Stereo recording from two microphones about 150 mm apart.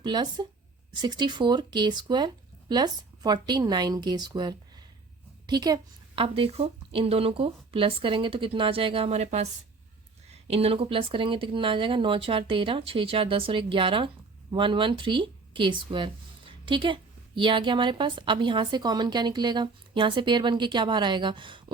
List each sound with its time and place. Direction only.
0.0 s a woman's voice: 30° right (ahead or behind)
6.2 s speech: 40° right (ahead or behind)
10.5 s speech: 40° right (ahead or behind)